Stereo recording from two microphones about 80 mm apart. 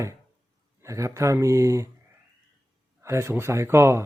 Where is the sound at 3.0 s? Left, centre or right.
Right.